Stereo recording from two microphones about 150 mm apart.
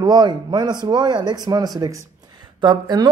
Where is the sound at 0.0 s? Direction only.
25° right (ahead or behind).